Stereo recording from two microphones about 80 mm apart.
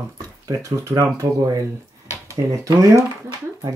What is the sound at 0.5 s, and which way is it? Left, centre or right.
Speech, right.